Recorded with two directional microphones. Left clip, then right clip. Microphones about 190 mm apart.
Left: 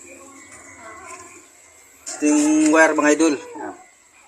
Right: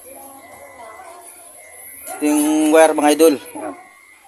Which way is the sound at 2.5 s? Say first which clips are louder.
Right 4 dB; 55° right (ahead or behind).